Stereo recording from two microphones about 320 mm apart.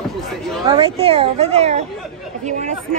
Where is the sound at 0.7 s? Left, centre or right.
Centre.